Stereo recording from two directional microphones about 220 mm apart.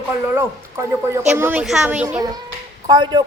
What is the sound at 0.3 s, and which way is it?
A woman's voice, 10° right (ahead or behind).